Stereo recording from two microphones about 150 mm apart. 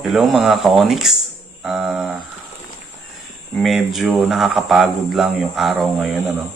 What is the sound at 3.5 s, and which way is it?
Speech, centre (ahead or behind).